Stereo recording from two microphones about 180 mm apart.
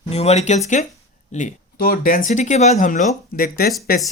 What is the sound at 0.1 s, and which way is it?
Speech, 35° left (ahead or behind).